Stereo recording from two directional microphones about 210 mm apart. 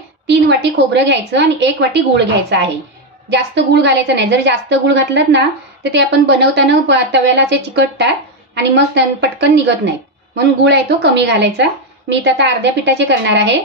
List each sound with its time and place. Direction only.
0.3 s a woman's voice: 55° right (ahead or behind)
3.3 s a woman's voice: 55° right (ahead or behind)